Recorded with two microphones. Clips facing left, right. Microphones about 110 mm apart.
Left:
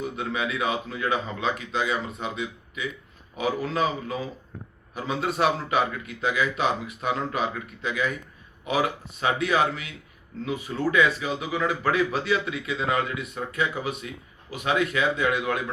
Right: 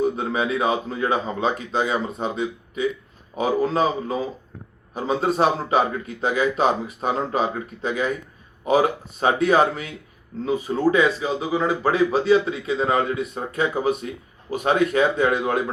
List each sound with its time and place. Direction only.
0.0 s a man's voice: 35° right (ahead or behind)